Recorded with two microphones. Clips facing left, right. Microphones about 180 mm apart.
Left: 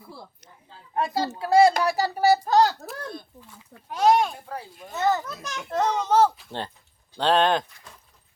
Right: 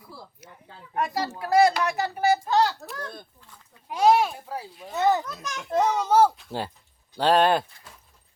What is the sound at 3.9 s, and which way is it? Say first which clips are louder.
Speech: even; 5° right (ahead or behind).